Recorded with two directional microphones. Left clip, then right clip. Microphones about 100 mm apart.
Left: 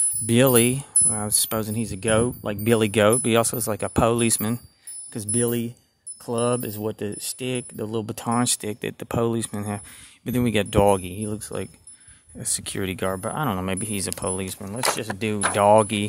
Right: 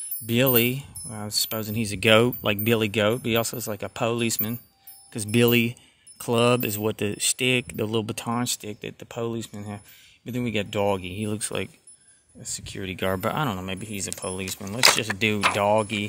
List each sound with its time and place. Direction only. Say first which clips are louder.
0.3 s speech: left 3 dB; 30° left (ahead or behind)
1.8 s speech: right 5 dB; centre (ahead or behind)
2.6 s speech: left 5 dB; 25° left (ahead or behind)
5.3 s speech: right 5 dB; 30° right (ahead or behind)
6.2 s speech: right 3 dB; 10° right (ahead or behind)
8.0 s speech: right 1 dB; 10° left (ahead or behind)
8.3 s speech: left 4 dB; 30° left (ahead or behind)
11.1 s speech: right 1 dB; centre (ahead or behind)
12.4 s speech: left 6 dB; 50° left (ahead or behind)
13.1 s speech: right 2 dB; 15° right (ahead or behind)
13.6 s speech: left 5 dB; 40° left (ahead or behind)
14.2 s speech: left 2 dB; 25° left (ahead or behind)
14.8 s speech: right 6 dB; centre (ahead or behind)
15.6 s speech: left 5 dB; 40° left (ahead or behind)